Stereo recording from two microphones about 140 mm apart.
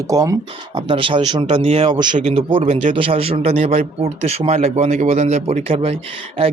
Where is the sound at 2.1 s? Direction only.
45° right (ahead or behind).